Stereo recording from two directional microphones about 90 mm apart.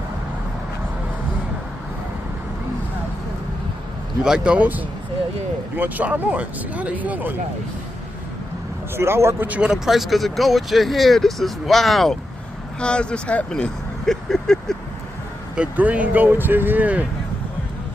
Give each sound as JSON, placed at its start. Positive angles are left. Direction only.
{"t": 4.2, "sound": "speech", "side_deg": -10}
{"t": 8.9, "sound": "speech", "side_deg": -30}
{"t": 9.5, "sound": "speech", "side_deg": -10}
{"t": 15.5, "sound": "speech", "side_deg": -15}